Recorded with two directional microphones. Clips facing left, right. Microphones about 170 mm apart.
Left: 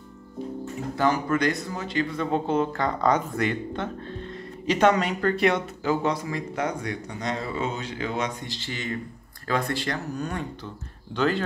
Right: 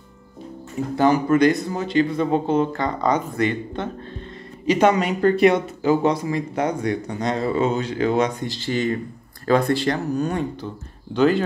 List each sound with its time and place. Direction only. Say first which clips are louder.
0.9 s speech: right 7 dB; 20° right (ahead or behind)
2.3 s speech: right 2 dB; centre (ahead or behind)
4.6 s speech: right 3 dB; 10° right (ahead or behind)